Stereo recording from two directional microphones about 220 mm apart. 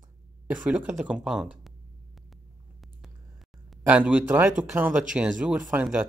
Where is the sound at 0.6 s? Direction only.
5° right (ahead or behind).